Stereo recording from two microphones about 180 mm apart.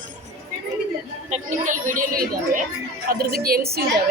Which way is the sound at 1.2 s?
40° right (ahead or behind).